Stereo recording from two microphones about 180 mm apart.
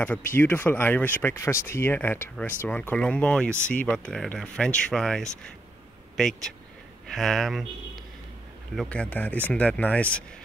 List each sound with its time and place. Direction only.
0.0 s speech: 10° left (ahead or behind)
8.7 s speech: 5° left (ahead or behind)